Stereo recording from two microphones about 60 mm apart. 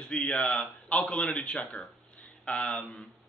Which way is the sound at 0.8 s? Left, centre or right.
Left.